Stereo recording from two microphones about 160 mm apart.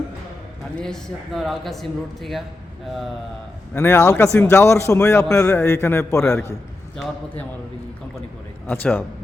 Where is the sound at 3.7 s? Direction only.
15° left (ahead or behind).